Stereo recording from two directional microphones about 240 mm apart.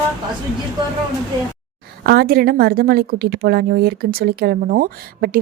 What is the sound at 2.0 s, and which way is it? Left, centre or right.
A woman's voice, right.